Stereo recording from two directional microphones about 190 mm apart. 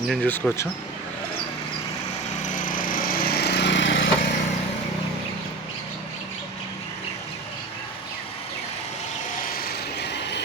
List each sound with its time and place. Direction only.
0.1 s speech: 5° left (ahead or behind)
2.4 s lawn mower: 45° left (ahead or behind); by 4.4 s 80° left
9.6 s vehicle: 60° left (ahead or behind)